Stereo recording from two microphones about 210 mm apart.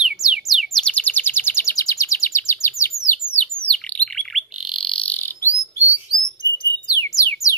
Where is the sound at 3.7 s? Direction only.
5° left (ahead or behind).